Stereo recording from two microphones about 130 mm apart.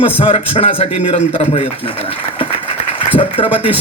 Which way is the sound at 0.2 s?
45° left (ahead or behind).